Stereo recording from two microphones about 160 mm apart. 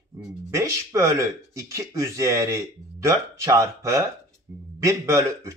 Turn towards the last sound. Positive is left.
turn(degrees=-20)  # may be behind; listen again after turning